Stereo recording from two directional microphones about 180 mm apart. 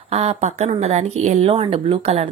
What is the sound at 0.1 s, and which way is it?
Speech, 35° right (ahead or behind).